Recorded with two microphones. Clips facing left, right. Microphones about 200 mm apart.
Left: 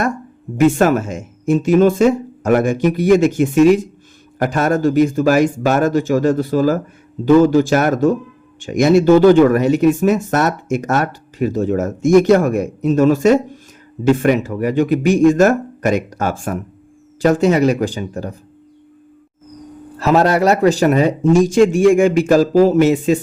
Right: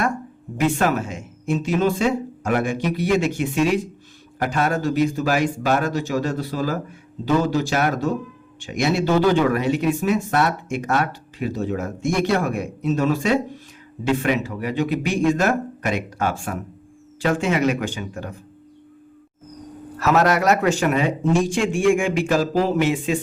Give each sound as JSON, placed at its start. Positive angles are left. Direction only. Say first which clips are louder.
{"t": 0.5, "sound": "speech", "louder": "left 7 dB", "side_deg": 45}
{"t": 20.0, "sound": "speech", "louder": "left 5 dB", "side_deg": 30}